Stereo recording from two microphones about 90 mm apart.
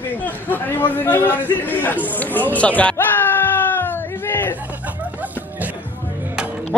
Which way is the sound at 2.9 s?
25° left (ahead or behind).